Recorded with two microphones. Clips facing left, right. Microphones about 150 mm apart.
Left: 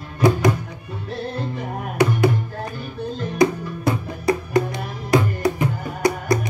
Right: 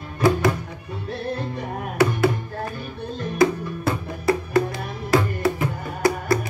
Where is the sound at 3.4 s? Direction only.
20° left (ahead or behind).